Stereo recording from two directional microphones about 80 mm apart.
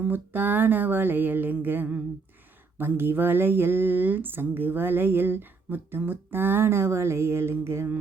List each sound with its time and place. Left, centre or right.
0.0 s speech: right